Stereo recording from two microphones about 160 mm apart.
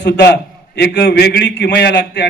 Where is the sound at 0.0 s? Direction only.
90° left.